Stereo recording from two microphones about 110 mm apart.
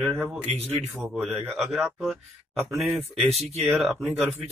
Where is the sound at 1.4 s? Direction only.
Centre (ahead or behind).